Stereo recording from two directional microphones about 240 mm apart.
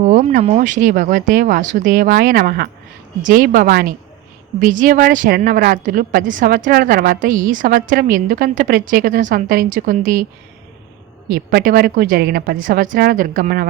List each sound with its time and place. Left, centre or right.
0.0 s a woman's voice: right
11.3 s a woman's voice: right